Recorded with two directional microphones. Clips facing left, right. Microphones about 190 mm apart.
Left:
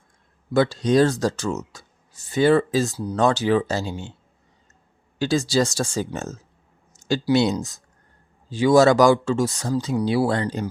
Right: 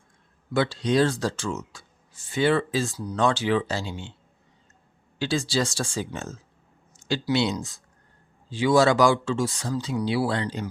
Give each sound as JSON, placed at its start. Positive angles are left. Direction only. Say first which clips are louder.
{"t": 0.5, "sound": "speech", "louder": "left 4 dB", "side_deg": 45}
{"t": 5.2, "sound": "speech", "louder": "left 5 dB", "side_deg": 40}